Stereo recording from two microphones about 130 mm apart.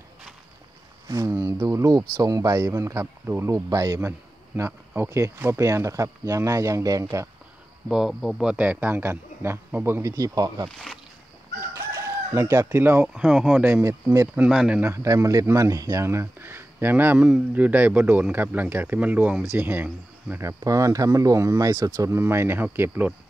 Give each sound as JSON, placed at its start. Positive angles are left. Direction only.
{"t": 1.0, "sound": "speech", "side_deg": -25}
{"t": 4.6, "sound": "speech", "side_deg": -15}
{"t": 7.9, "sound": "speech", "side_deg": 0}
{"t": 11.7, "sound": "chicken", "side_deg": -20}
{"t": 12.6, "sound": "speech", "side_deg": -15}
{"t": 13.8, "sound": "speech", "side_deg": -20}
{"t": 14.5, "sound": "speech", "side_deg": 0}
{"t": 14.8, "sound": "speech", "side_deg": -20}